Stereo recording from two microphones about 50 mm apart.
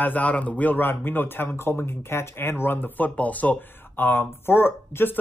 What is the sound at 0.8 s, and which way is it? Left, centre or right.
Speech, left.